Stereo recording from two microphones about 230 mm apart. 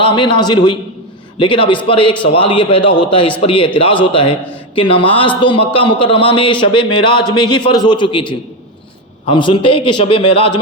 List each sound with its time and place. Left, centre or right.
0.0 s a man's voice: left